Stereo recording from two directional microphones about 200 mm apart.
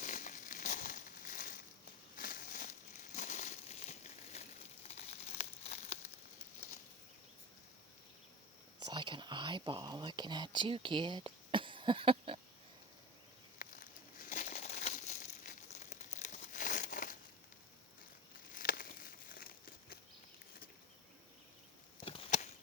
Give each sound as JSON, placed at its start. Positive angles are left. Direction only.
{"t": 0.0, "sound": "crumpling", "side_deg": 40}
{"t": 8.9, "sound": "speech", "side_deg": -25}
{"t": 13.6, "sound": "crumpling", "side_deg": 45}
{"t": 18.5, "sound": "a sound", "side_deg": 45}
{"t": 19.3, "sound": "crumpling", "side_deg": 45}
{"t": 22.0, "sound": "a sound", "side_deg": 30}